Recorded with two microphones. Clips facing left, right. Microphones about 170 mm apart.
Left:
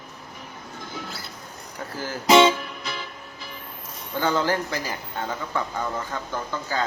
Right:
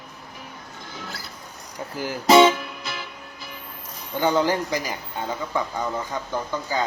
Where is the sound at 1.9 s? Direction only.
15° right (ahead or behind).